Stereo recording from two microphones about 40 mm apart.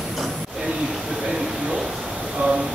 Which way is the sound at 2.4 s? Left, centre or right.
Right.